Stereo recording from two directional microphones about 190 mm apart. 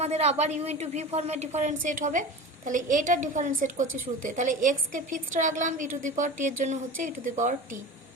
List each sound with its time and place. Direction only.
0.0 s a woman's voice: 35° right (ahead or behind)